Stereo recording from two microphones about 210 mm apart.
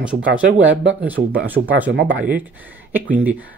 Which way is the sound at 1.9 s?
55° right (ahead or behind).